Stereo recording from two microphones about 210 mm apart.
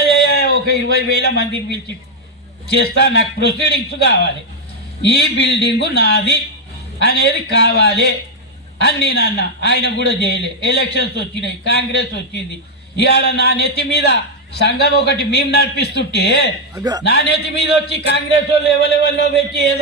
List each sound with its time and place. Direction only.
0.1 s a sound: 50° left (ahead or behind)
2.6 s a man's voice: 50° left (ahead or behind)
13.0 s a man's voice: 50° left (ahead or behind)
16.7 s a man's voice: 20° right (ahead or behind)
17.0 s a man's voice: 50° left (ahead or behind)